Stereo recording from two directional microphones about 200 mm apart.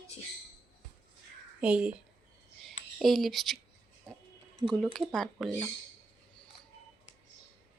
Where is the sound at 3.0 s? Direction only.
Centre (ahead or behind).